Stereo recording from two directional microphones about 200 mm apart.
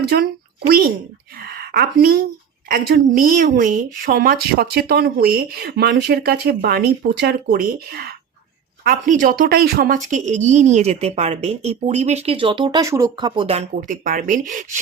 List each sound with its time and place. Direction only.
0.1 s a woman's voice: 50° right (ahead or behind)
1.4 s a sound: 50° right (ahead or behind)
2.6 s a woman's voice: 45° right (ahead or behind)